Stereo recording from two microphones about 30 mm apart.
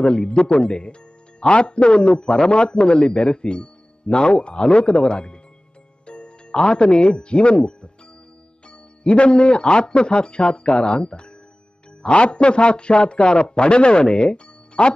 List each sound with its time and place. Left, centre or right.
0.0 s speech: left
2.1 s speech: left